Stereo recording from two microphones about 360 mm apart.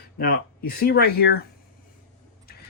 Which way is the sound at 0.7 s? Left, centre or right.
Left.